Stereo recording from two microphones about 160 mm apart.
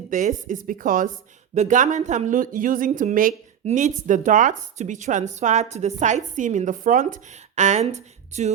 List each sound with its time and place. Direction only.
0.1 s speech: 50° right (ahead or behind)
3.6 s speech: 45° right (ahead or behind)